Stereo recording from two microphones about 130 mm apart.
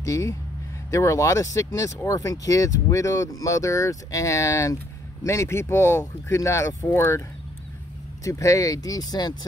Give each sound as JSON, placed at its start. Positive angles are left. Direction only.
{"t": 0.0, "sound": "speech", "side_deg": 25}